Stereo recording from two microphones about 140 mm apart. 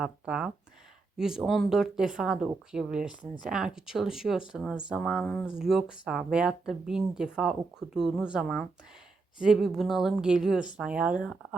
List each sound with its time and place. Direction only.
0.0 s speech: 5° right (ahead or behind)
5.0 s speech: 10° left (ahead or behind)
5.5 s speech: 5° right (ahead or behind)